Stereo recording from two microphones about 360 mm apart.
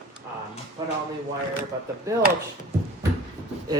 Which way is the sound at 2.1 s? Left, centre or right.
Centre.